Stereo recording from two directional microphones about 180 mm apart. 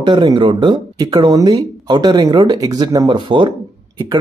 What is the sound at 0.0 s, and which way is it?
Speech, 25° right (ahead or behind).